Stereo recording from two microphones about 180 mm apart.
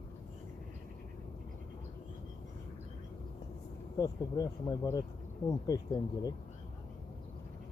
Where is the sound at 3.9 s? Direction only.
20° left (ahead or behind).